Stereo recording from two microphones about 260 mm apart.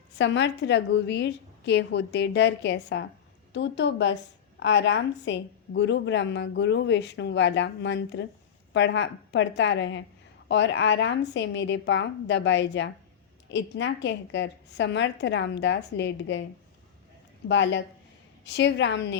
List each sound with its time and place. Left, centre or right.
0.2 s a woman's voice: left
17.5 s a woman's voice: left